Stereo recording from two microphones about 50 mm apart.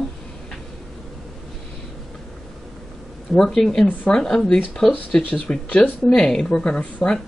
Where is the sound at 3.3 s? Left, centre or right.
Centre.